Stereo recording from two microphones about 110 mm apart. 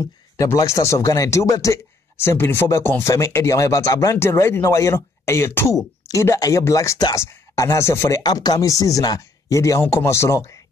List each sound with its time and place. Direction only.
0.0 s speech: 25° left (ahead or behind)